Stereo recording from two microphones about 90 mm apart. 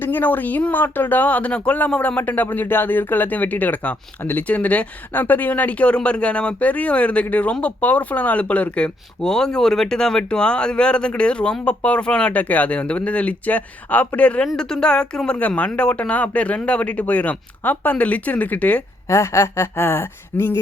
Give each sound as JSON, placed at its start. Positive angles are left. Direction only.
{"t": 0.0, "sound": "speech", "side_deg": 20}
{"t": 19.0, "sound": "speech", "side_deg": 35}